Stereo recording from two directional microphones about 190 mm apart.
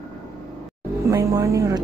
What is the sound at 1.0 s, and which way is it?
Speech, 15° right (ahead or behind).